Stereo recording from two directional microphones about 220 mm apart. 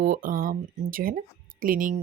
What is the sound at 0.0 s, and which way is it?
Speech, 35° right (ahead or behind).